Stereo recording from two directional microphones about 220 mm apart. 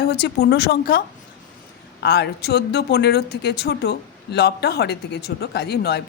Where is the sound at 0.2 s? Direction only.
45° left (ahead or behind).